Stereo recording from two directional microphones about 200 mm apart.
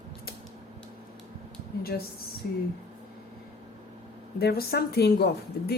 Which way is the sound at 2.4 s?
50° left (ahead or behind).